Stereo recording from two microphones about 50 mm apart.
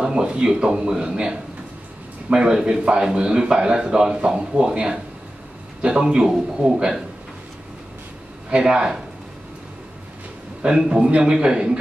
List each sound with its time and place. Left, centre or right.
0.0 s a man's voice: centre
8.6 s a man's voice: centre
10.6 s a man's voice: centre